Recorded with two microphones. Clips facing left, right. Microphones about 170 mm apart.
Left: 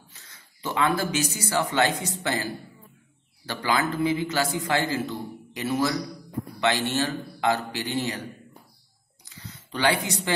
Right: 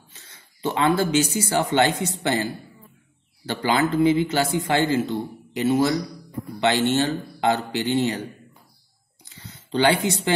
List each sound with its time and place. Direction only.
0.1 s speech: 25° right (ahead or behind)
3.4 s speech: 25° right (ahead or behind)
9.2 s a sound: 25° right (ahead or behind)